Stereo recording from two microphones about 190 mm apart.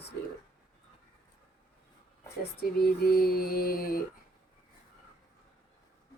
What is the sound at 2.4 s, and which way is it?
Speech, 55° left (ahead or behind).